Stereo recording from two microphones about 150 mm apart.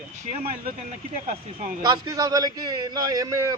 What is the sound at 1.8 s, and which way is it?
A man's voice, 25° right (ahead or behind).